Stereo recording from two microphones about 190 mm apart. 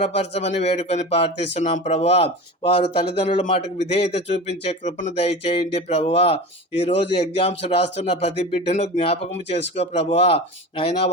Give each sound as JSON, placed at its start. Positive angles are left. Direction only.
{"t": 0.2, "sound": "speech", "side_deg": 35}